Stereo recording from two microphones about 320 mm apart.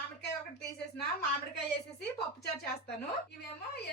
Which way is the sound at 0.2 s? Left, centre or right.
Left.